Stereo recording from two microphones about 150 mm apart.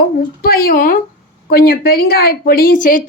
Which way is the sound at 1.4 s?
90° left.